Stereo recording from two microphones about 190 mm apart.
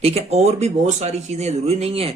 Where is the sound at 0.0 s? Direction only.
35° right (ahead or behind).